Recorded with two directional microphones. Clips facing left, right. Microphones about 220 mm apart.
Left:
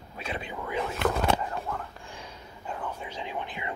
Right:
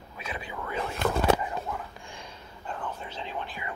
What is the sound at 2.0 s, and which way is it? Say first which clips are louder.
Whispering: left 1 dB; 5° left (ahead or behind).